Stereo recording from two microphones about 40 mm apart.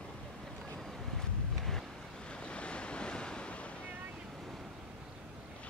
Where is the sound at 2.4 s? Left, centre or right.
Left.